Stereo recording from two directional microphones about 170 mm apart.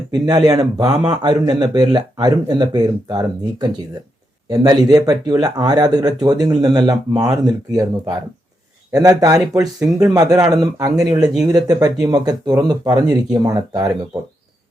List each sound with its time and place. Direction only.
0.1 s speech: 25° right (ahead or behind)